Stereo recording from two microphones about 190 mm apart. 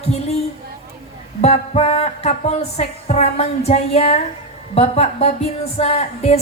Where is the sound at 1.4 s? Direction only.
35° left (ahead or behind).